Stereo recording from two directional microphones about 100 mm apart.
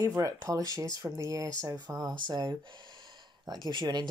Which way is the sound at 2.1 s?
50° right (ahead or behind).